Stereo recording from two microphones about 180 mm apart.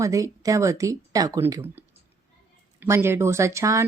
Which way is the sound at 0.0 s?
20° right (ahead or behind).